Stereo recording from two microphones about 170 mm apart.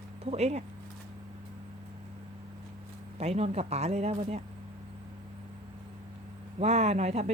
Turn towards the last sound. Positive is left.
turn(degrees=-40)  # may be behind; listen again after turning